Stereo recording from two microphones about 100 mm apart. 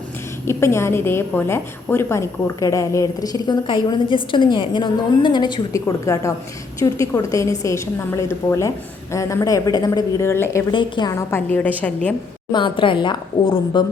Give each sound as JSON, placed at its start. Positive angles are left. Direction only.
{"t": 0.4, "sound": "a woman's voice", "side_deg": 25}
{"t": 5.7, "sound": "a woman's voice", "side_deg": 30}
{"t": 10.2, "sound": "a woman's voice", "side_deg": 25}
{"t": 10.7, "sound": "a woman's voice", "side_deg": 50}
{"t": 11.2, "sound": "a woman's voice", "side_deg": 25}
{"t": 12.5, "sound": "a woman's voice", "side_deg": 50}